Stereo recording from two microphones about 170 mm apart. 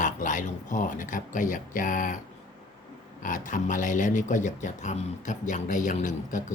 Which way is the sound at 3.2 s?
50° left (ahead or behind).